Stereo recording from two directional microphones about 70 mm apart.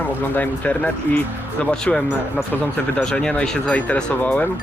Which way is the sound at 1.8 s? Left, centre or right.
Centre.